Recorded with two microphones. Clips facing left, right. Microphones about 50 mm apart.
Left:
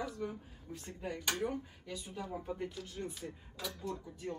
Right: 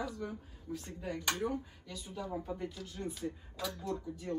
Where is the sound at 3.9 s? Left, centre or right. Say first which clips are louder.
Right 4 dB; centre.